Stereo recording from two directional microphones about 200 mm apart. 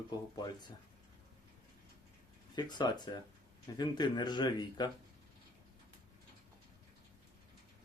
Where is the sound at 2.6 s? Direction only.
20° left (ahead or behind).